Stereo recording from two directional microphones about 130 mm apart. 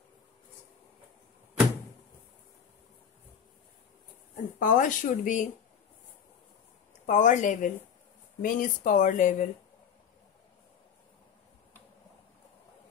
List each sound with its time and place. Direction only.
4.6 s speech: 90° left
7.1 s a woman's voice: 75° left (ahead or behind)
8.4 s speech: 90° left